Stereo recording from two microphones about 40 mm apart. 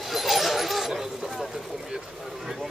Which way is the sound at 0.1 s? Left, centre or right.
Centre.